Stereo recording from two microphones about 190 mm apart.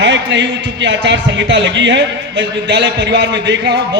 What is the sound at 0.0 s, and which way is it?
A man's voice, 65° right (ahead or behind).